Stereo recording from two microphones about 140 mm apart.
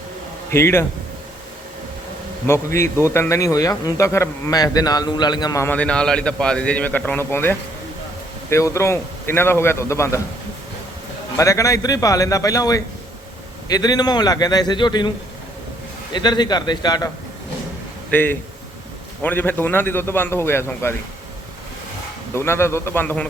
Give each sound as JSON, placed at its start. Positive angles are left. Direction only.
{"t": 0.5, "sound": "a man's voice", "side_deg": 20}
{"t": 2.5, "sound": "a man's voice", "side_deg": 20}
{"t": 5.6, "sound": "a man's voice", "side_deg": 10}
{"t": 11.3, "sound": "a man's voice", "side_deg": 20}
{"t": 16.1, "sound": "a man's voice", "side_deg": 30}
{"t": 18.1, "sound": "speech", "side_deg": 15}
{"t": 22.4, "sound": "speech", "side_deg": 20}